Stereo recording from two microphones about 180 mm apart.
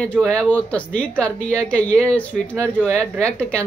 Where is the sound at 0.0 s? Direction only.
5° left (ahead or behind).